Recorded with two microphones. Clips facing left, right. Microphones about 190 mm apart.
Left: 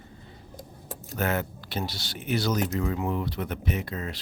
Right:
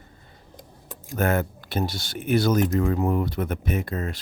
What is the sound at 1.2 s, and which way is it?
Speech, 50° right (ahead or behind).